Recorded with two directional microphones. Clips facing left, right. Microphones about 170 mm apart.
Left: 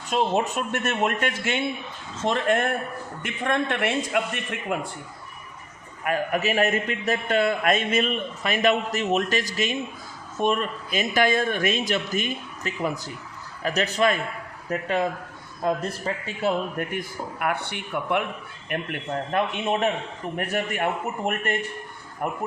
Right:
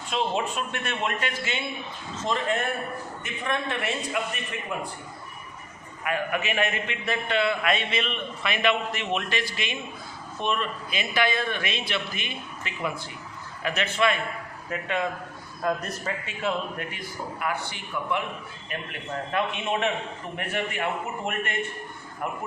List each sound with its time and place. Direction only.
0.1 s a man's voice: 45° left (ahead or behind); by 4.2 s 60° left (ahead or behind)
6.1 s a man's voice: 40° left (ahead or behind); by 18.8 s 60° left (ahead or behind)
19.3 s a man's voice: 45° left (ahead or behind)